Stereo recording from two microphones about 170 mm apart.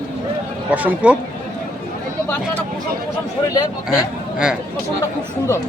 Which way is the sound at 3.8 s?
5° right (ahead or behind).